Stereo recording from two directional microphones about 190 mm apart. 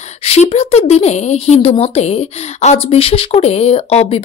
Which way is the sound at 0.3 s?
35° left (ahead or behind).